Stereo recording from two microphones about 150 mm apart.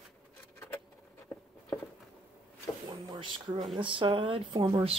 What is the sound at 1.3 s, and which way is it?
Patter, 10° left (ahead or behind).